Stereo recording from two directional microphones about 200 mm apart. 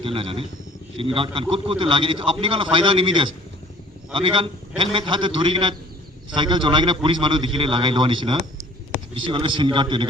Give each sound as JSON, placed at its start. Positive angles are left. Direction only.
{"t": 0.0, "sound": "a man's voice", "side_deg": -25}